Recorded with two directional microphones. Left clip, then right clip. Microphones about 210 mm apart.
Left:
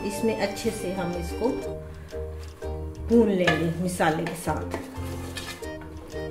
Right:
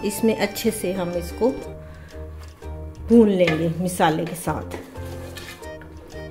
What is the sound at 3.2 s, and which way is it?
A woman's voice, 40° right (ahead or behind).